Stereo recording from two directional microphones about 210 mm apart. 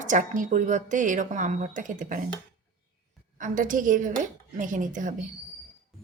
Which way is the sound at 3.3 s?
40° right (ahead or behind).